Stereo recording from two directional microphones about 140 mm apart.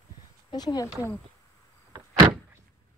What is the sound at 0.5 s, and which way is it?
Speech, 30° left (ahead or behind).